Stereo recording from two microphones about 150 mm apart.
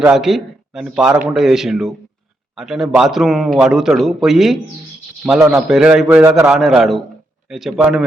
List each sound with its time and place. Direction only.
0.0 s a man's voice: 5° right (ahead or behind)